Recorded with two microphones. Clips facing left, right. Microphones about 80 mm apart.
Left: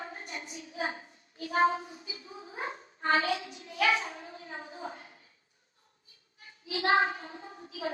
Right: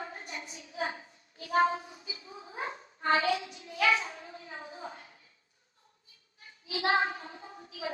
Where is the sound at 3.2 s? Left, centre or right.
Left.